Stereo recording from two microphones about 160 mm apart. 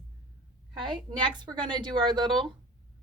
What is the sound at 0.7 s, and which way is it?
A woman's voice, 30° right (ahead or behind).